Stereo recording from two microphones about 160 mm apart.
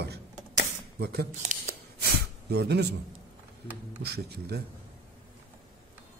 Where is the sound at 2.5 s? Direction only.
90° right.